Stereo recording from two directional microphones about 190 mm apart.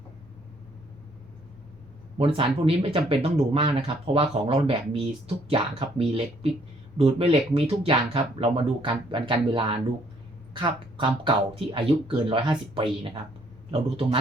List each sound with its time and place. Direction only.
2.1 s speech: 30° right (ahead or behind)
6.0 s speech: 30° right (ahead or behind)